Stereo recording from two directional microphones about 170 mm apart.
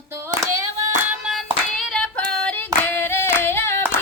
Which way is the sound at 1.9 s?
5° left (ahead or behind).